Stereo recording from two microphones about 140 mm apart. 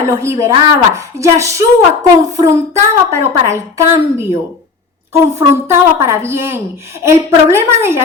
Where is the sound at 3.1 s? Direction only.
20° right (ahead or behind).